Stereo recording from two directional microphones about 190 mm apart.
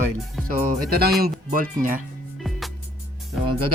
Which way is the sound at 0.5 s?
50° right (ahead or behind).